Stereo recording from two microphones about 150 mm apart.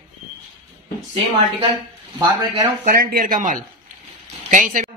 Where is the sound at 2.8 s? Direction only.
65° right (ahead or behind).